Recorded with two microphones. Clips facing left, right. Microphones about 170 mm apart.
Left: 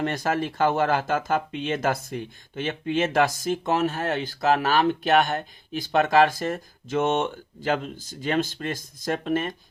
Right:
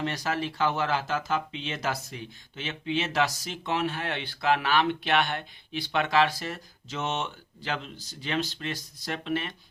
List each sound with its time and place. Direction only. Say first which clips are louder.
0.0 s speech: left 5 dB; 50° left (ahead or behind)